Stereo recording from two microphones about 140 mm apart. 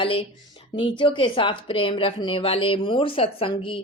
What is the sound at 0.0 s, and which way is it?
A woman's voice, 40° left (ahead or behind).